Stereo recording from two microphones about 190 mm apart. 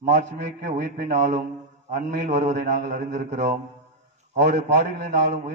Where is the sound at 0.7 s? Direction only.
50° right (ahead or behind).